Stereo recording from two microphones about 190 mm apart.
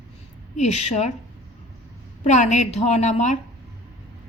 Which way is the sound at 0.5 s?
35° left (ahead or behind).